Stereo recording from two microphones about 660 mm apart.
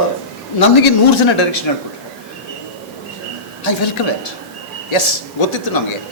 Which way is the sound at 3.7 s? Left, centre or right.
Left.